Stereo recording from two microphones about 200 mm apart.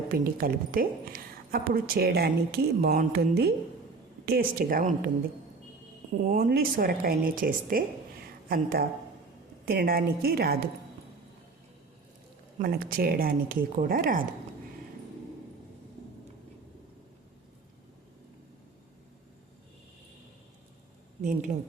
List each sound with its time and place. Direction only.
0.1 s a woman's voice: 45° right (ahead or behind)
6.3 s a woman's voice: 45° right (ahead or behind)
12.5 s a woman's voice: 45° right (ahead or behind)
21.2 s speech: 40° right (ahead or behind)